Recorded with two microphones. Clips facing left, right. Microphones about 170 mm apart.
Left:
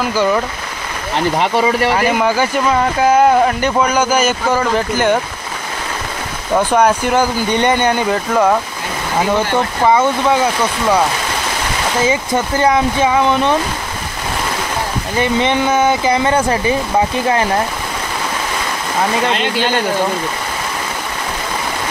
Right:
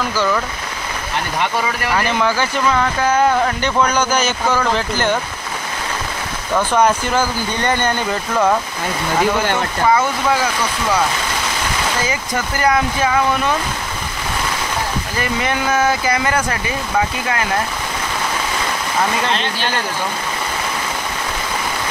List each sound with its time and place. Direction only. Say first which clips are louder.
0.1 s speech: left 5 dB; 15° left (ahead or behind)
1.4 s speech: left 6 dB; 25° left (ahead or behind)
2.0 s speech: left 3 dB; 10° left (ahead or behind)
6.5 s speech: left 3 dB; 15° left (ahead or behind)
9.9 s speech: left 4 dB; 25° left (ahead or behind)
12.1 s speech: left 6 dB; 25° left (ahead or behind)
15.1 s speech: left 7 dB; 25° left (ahead or behind)